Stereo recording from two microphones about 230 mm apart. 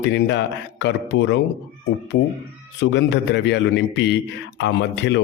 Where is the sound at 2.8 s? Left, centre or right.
Left.